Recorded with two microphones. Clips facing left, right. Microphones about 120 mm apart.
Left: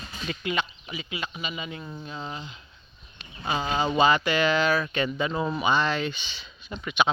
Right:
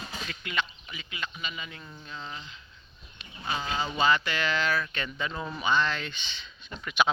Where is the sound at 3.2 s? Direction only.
45° left (ahead or behind).